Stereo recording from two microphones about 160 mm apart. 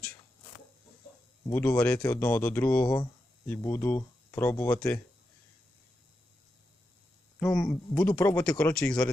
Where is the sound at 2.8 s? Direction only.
25° left (ahead or behind).